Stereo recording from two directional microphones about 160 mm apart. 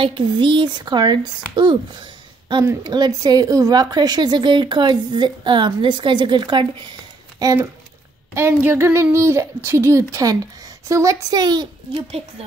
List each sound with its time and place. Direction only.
0.0 s a woman's voice: 30° right (ahead or behind)